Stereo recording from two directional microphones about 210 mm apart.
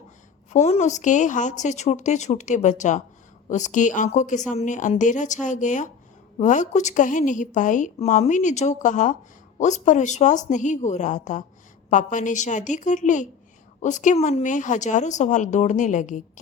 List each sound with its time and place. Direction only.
0.5 s a woman's voice: 30° left (ahead or behind)